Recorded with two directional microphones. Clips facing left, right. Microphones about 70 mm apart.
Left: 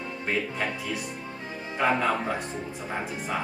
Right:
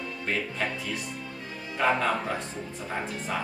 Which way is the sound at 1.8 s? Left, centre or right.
Centre.